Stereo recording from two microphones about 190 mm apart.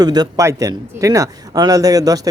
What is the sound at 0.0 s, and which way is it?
A man's voice, 20° right (ahead or behind).